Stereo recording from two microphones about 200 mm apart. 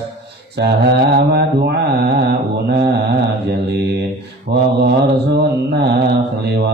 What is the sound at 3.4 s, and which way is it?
Mantra, 55° right (ahead or behind).